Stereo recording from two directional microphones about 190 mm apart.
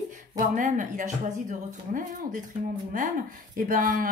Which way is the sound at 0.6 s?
45° right (ahead or behind).